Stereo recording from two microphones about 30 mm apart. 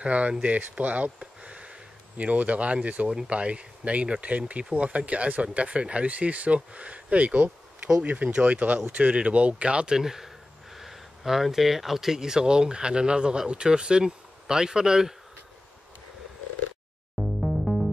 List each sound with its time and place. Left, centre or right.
0.0 s speech: right
1.2 s a sound: right
2.1 s speech: right
6.0 s speech: right
8.5 s speech: right
9.1 s speech: right
9.8 s speech: centre
17.4 s music: centre